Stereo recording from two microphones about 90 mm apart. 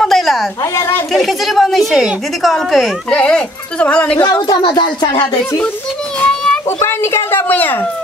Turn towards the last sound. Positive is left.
turn(degrees=20)  # may be behind; listen again after turning